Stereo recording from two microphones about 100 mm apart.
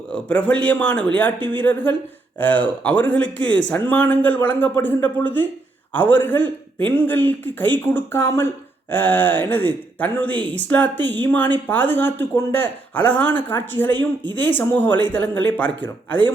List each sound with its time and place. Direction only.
0.1 s speech: 10° left (ahead or behind)